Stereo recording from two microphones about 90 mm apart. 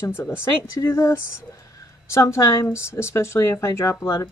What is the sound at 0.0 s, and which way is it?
Speech, 25° left (ahead or behind).